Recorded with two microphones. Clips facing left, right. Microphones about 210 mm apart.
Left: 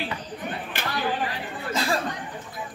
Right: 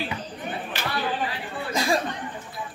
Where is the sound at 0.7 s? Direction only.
50° left (ahead or behind).